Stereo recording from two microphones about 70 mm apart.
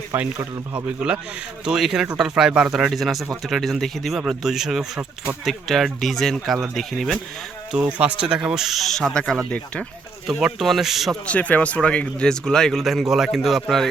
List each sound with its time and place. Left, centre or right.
0.9 s speech: centre
2.7 s speech: centre
4.9 s speech: right
5.5 s speech: centre
7.7 s speech: centre
11.3 s speech: left; by 13.6 s centre